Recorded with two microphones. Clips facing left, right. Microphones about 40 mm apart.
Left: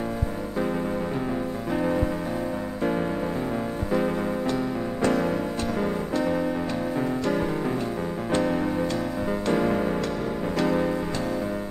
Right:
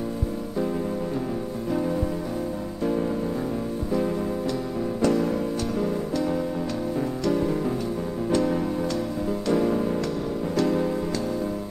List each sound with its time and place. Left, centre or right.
1.7 s music: left